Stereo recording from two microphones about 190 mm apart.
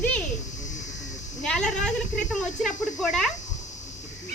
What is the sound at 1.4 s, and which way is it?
Speech, 5° left (ahead or behind).